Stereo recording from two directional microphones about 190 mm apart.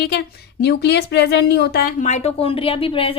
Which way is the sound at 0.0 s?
55° left (ahead or behind).